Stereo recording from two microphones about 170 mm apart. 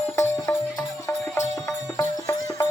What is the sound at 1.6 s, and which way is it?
Music, 20° left (ahead or behind).